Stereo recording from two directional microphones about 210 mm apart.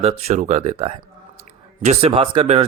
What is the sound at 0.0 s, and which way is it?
Speech, 30° right (ahead or behind).